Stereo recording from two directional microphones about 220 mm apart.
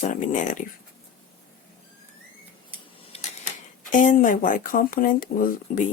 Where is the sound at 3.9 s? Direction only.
35° left (ahead or behind).